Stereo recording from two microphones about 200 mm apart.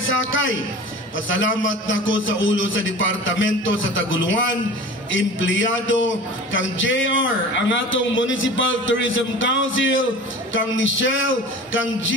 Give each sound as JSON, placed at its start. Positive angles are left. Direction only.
{"t": 0.0, "sound": "a man's voice", "side_deg": 70}